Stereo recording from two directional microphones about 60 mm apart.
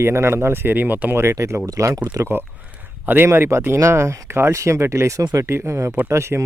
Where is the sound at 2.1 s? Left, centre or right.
Right.